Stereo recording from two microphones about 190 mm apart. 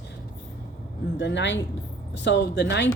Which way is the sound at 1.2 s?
65° left (ahead or behind).